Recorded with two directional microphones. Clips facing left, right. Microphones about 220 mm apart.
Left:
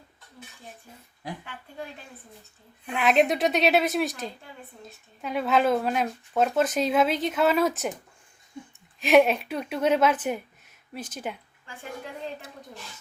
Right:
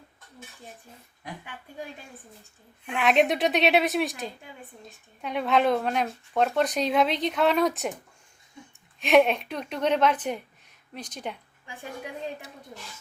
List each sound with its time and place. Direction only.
2.8 s speech: centre (ahead or behind)
9.0 s speech: centre (ahead or behind)
11.6 s a woman's voice: 15° right (ahead or behind)